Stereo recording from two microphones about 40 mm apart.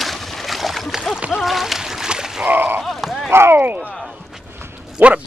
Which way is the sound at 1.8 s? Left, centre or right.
Centre.